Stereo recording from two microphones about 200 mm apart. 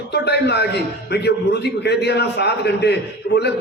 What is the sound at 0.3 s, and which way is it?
Speech, 55° left (ahead or behind).